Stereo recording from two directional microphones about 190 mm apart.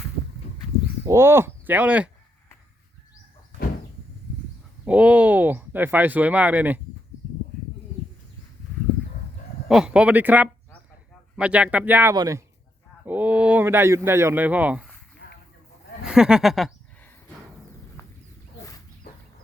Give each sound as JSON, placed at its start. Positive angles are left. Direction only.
{"t": 1.0, "sound": "speech", "side_deg": -15}
{"t": 4.9, "sound": "speech", "side_deg": -5}
{"t": 9.6, "sound": "speech", "side_deg": -5}
{"t": 13.1, "sound": "speech", "side_deg": -10}
{"t": 16.0, "sound": "a sound", "side_deg": -5}